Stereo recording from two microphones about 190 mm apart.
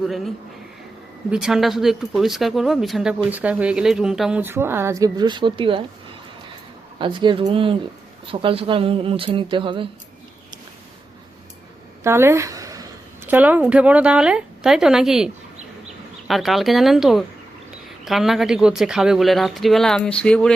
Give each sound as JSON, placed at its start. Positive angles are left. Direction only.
{"t": 0.0, "sound": "speech", "side_deg": 0}
{"t": 7.0, "sound": "speech", "side_deg": -25}
{"t": 12.0, "sound": "a woman's voice", "side_deg": -15}